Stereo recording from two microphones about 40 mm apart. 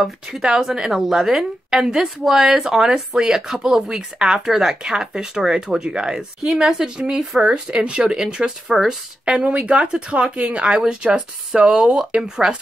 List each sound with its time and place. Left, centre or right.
0.0 s a woman's voice: centre
6.4 s a woman's voice: centre
7.4 s a woman's voice: right; by 8.9 s centre
9.2 s speech: right